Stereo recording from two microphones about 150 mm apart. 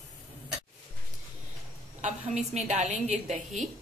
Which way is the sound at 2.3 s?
45° right (ahead or behind).